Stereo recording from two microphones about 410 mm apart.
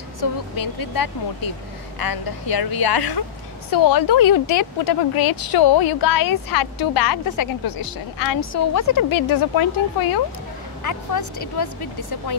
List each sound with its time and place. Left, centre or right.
0.2 s a woman's voice: left
11.1 s speech: left